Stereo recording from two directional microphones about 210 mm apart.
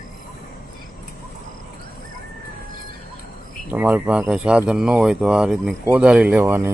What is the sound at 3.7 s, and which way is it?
Speech, 10° right (ahead or behind).